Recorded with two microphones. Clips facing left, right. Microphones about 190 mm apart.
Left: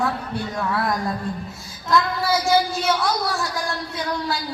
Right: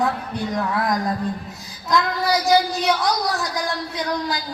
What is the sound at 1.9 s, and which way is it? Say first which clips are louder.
Child singing: even; 15° right (ahead or behind).